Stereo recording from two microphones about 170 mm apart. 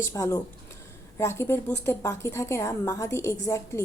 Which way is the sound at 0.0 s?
15° left (ahead or behind).